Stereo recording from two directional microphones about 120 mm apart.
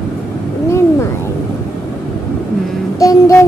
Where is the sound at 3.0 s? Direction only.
25° left (ahead or behind).